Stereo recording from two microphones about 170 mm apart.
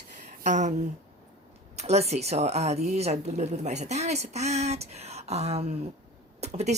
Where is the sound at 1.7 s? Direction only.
40° right (ahead or behind).